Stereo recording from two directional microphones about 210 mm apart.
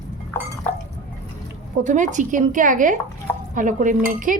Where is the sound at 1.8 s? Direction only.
35° right (ahead or behind).